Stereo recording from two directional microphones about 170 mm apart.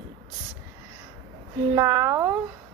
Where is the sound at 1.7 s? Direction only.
15° right (ahead or behind).